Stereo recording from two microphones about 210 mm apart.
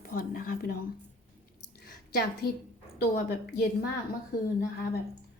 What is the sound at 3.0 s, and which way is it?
Speech, 45° left (ahead or behind).